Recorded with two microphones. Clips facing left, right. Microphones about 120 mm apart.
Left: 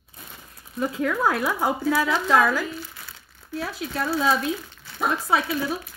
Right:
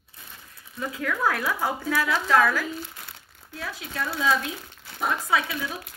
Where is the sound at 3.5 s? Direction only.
35° left (ahead or behind).